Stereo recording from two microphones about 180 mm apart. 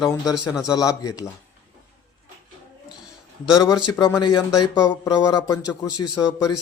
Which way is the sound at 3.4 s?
5° right (ahead or behind).